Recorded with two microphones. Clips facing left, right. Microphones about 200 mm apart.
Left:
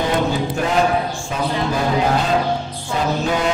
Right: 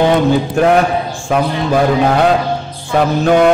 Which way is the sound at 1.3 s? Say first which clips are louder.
Right 10 dB; 65° right (ahead or behind).